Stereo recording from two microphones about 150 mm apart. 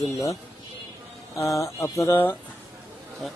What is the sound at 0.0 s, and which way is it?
Speech, 20° left (ahead or behind).